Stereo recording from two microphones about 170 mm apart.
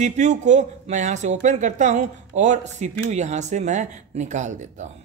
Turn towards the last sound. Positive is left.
turn(degrees=-45)  # may be behind; listen again after turning